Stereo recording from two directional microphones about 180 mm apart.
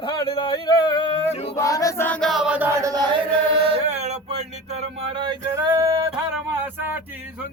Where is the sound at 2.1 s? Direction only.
Centre (ahead or behind); by 3.2 s 20° right (ahead or behind).